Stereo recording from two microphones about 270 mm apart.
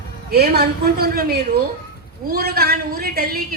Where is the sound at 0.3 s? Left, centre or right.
Right.